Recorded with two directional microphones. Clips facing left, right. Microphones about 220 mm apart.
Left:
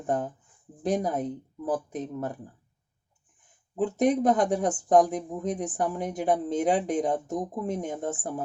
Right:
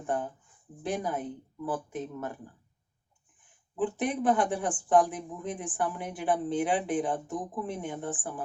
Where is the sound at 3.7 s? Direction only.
40° left (ahead or behind).